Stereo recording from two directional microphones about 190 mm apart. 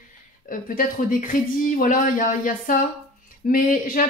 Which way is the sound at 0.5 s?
45° left (ahead or behind).